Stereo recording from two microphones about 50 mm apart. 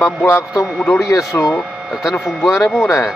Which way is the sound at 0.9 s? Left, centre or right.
Left.